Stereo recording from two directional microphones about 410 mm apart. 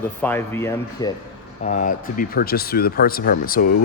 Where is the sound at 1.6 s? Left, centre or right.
Centre.